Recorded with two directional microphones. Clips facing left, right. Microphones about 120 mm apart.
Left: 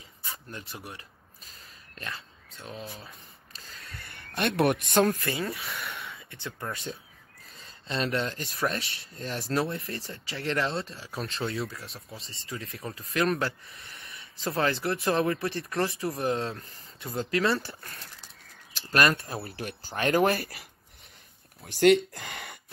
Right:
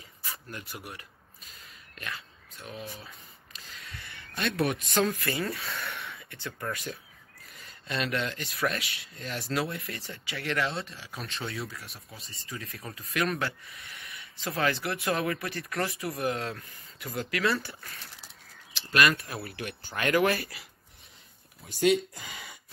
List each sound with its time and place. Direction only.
0.3 s speech: 25° left (ahead or behind)
3.5 s a sound: 50° left (ahead or behind)
5.2 s speech: 25° left (ahead or behind)
5.9 s a sound: 25° left (ahead or behind)
8.5 s speech: 35° left (ahead or behind)
18.7 s speech: 40° left (ahead or behind)
21.6 s speech: 65° left (ahead or behind)